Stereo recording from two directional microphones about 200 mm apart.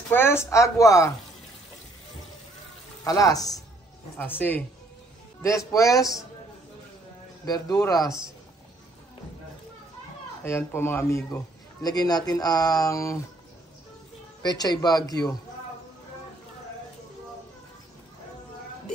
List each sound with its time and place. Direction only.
0.1 s a man's voice: 10° left (ahead or behind)
3.0 s a man's voice: 15° left (ahead or behind)
7.4 s speech: 20° left (ahead or behind)
10.4 s a man's voice: 10° left (ahead or behind)
14.4 s speech: 20° left (ahead or behind)